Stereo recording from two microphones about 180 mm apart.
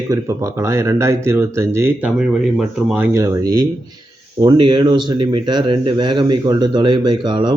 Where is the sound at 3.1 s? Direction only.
15° right (ahead or behind).